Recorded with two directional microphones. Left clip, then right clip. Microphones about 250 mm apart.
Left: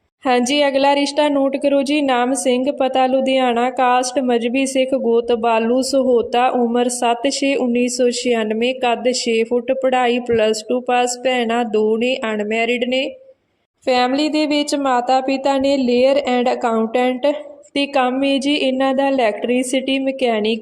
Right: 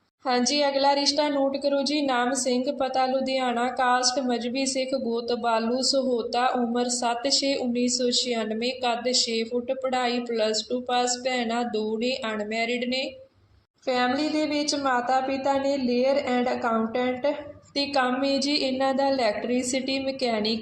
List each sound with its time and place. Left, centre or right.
0.5 s speech: left